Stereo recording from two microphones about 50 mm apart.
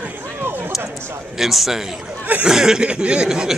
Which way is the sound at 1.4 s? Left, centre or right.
Centre.